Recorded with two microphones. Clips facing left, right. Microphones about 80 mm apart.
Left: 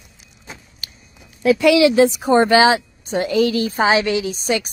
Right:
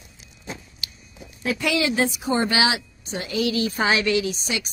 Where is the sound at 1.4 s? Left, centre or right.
Left.